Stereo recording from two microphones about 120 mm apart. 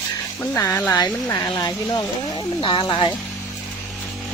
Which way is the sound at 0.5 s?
20° left (ahead or behind).